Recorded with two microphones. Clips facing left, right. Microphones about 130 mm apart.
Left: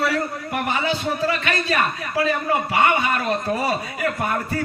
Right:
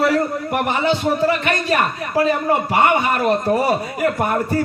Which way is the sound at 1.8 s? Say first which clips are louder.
Right 4 dB; 40° right (ahead or behind).